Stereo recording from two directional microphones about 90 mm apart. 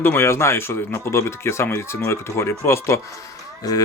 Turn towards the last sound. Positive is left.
turn(degrees=45)  # may be behind; listen again after turning